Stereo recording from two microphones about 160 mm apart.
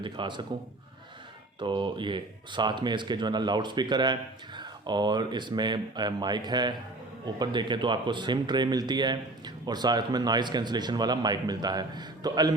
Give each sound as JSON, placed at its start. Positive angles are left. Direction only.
{"t": 0.0, "sound": "speech", "side_deg": -30}
{"t": 1.5, "sound": "speech", "side_deg": -30}